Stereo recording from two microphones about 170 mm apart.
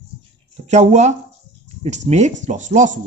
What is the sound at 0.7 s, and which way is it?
Speech, 40° right (ahead or behind).